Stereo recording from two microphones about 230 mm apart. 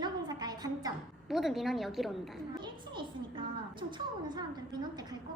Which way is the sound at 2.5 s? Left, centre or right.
Centre.